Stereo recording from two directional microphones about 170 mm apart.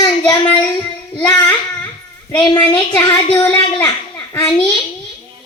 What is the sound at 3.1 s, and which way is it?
Speech, 25° left (ahead or behind).